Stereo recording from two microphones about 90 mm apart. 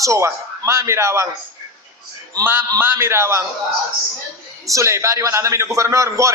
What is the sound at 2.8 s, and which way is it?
Speech, 25° right (ahead or behind).